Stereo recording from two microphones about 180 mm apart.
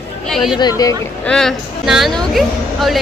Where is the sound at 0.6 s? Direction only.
20° left (ahead or behind).